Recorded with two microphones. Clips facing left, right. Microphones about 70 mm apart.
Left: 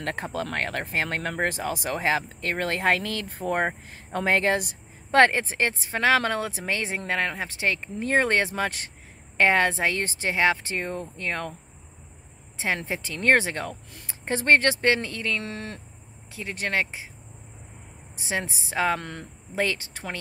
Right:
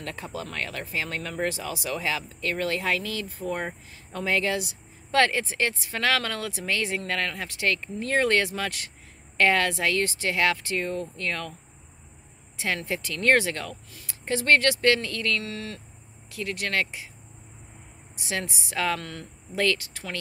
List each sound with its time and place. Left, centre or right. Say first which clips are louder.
0.0 s speech: left 5 dB; left
12.5 s speech: left 1 dB; left
18.2 s speech: left 2 dB; left